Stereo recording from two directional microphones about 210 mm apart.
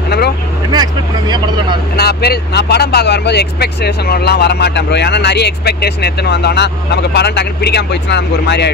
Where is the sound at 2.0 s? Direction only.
50° left (ahead or behind).